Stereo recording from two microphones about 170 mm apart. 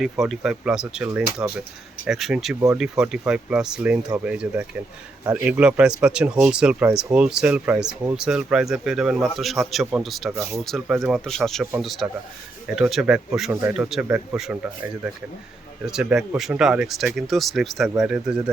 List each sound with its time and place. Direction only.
0.0 s speech: centre (ahead or behind)
10.3 s speech: 15° right (ahead or behind)
10.6 s speech: centre (ahead or behind)
15.9 s speech: 5° right (ahead or behind)